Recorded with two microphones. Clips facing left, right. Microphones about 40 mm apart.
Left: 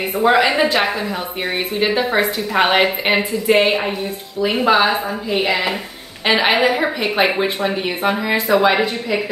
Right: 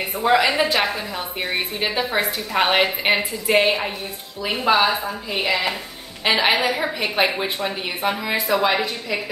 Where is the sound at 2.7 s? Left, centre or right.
Centre.